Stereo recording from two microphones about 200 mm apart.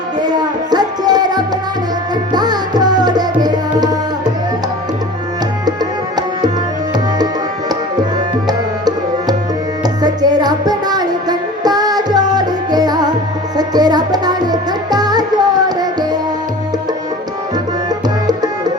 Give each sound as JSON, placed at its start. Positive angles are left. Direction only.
{"t": 0.2, "sound": "music", "side_deg": -20}
{"t": 5.6, "sound": "music", "side_deg": -20}
{"t": 8.4, "sound": "music", "side_deg": -20}
{"t": 17.8, "sound": "music", "side_deg": -20}